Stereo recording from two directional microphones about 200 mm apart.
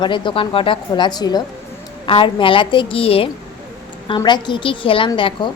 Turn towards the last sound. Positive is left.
turn(degrees=25)  # may be behind; listen again after turning